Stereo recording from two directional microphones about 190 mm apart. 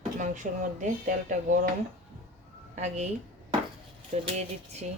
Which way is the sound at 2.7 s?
40° right (ahead or behind).